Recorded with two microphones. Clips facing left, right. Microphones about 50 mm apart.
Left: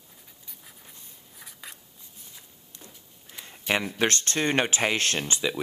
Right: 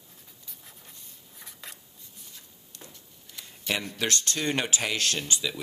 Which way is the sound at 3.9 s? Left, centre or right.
Left.